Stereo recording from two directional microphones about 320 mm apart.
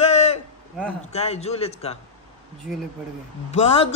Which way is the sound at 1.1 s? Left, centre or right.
Centre.